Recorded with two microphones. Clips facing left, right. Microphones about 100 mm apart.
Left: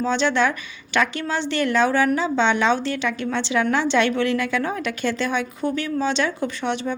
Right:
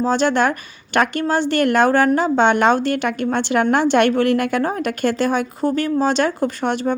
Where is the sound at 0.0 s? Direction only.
45° right (ahead or behind).